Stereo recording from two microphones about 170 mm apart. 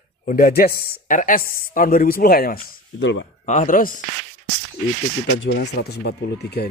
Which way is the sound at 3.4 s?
50° left (ahead or behind).